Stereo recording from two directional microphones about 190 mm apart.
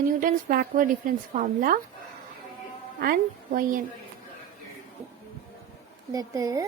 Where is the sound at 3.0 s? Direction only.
50° right (ahead or behind).